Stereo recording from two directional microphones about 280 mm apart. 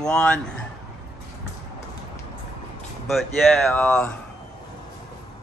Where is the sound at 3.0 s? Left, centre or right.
Centre.